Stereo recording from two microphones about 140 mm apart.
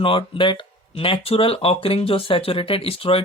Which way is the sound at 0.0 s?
40° left (ahead or behind).